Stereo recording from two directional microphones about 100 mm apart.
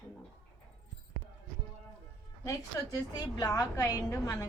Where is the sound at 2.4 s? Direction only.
30° left (ahead or behind).